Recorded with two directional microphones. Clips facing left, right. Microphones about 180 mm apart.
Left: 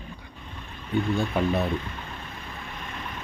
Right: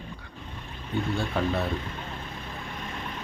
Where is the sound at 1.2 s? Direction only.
15° left (ahead or behind).